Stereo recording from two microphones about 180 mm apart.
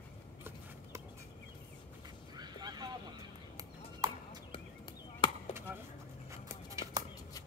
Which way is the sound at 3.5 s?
20° right (ahead or behind).